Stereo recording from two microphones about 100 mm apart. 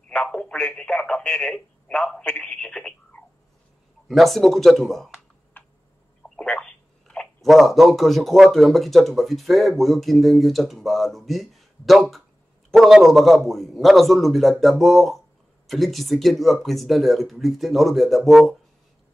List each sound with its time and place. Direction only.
0.1 s a man's voice: 10° left (ahead or behind)
5.5 s tick: 20° left (ahead or behind)
6.2 s a man's voice: 5° left (ahead or behind)